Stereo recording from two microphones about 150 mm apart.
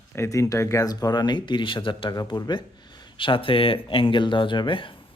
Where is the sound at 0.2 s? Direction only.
20° left (ahead or behind).